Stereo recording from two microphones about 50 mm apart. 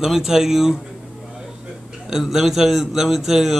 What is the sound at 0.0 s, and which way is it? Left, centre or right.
Speech, centre.